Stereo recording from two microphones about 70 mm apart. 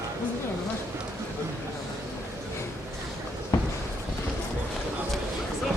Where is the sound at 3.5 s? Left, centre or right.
Left.